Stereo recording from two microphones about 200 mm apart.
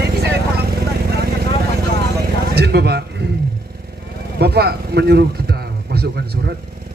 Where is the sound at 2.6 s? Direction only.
55° right (ahead or behind).